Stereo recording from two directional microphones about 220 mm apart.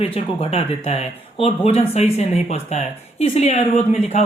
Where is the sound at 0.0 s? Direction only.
25° left (ahead or behind).